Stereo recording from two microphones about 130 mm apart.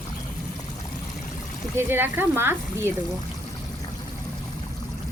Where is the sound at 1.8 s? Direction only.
15° right (ahead or behind).